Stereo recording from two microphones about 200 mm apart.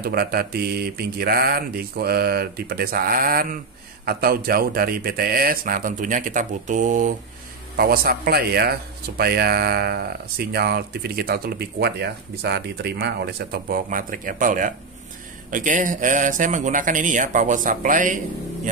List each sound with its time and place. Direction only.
0.0 s speech: 50° right (ahead or behind)